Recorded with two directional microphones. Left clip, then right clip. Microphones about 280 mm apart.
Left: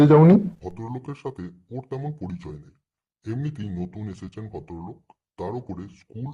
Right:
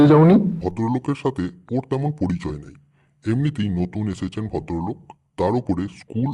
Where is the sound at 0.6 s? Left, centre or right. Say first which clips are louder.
Right 11 dB; right.